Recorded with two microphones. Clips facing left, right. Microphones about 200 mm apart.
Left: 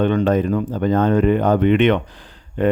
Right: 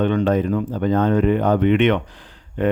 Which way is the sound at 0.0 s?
40° left (ahead or behind).